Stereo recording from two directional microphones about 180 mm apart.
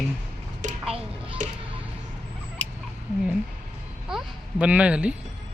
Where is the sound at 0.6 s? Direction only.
45° right (ahead or behind).